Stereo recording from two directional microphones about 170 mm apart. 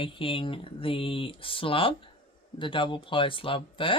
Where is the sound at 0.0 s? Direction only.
30° left (ahead or behind).